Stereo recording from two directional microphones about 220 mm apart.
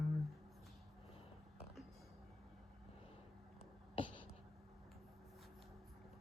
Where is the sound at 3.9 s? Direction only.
20° left (ahead or behind).